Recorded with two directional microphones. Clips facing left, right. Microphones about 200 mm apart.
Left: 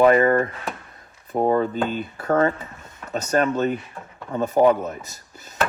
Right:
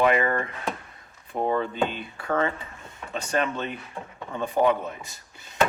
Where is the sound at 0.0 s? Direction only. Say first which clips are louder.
Left 7 dB; 40° left (ahead or behind).